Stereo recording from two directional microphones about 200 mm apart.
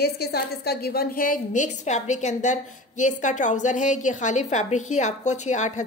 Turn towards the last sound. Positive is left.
turn(degrees=35)  # may be behind; listen again after turning